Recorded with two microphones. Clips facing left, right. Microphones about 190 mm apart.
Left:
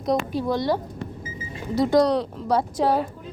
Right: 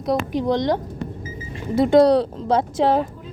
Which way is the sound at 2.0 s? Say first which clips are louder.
Right 6 dB; 30° right (ahead or behind).